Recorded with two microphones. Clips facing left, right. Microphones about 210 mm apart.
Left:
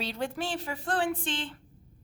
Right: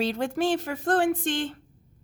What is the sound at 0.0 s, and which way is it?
A woman's voice, 45° right (ahead or behind).